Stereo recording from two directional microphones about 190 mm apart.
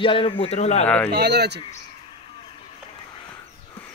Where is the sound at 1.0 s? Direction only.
60° right (ahead or behind).